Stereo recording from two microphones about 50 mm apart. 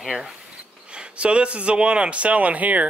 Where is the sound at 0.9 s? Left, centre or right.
Right.